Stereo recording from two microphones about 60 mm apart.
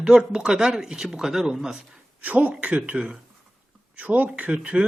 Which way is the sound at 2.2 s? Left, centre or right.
Right.